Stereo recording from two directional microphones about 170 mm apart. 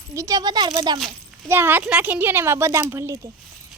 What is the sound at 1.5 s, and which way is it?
A woman's voice, 10° right (ahead or behind).